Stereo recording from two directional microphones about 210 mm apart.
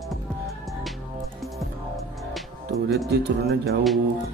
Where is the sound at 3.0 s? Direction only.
50° right (ahead or behind).